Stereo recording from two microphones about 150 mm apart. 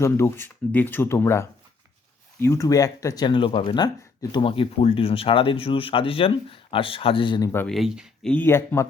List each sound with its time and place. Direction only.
0.0 s speech: 20° left (ahead or behind)
7.7 s speech: centre (ahead or behind)
8.3 s speech: 15° left (ahead or behind)